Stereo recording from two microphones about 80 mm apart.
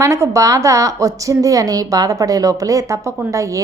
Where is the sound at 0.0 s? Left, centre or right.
Right.